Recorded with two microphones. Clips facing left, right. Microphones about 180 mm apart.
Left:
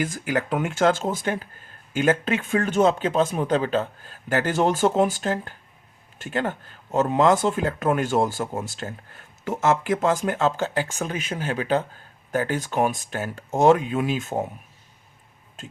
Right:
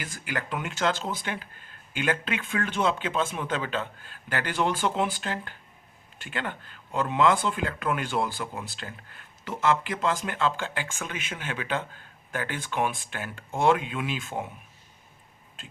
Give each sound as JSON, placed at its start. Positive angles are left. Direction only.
{"t": 0.0, "sound": "speech", "side_deg": 45}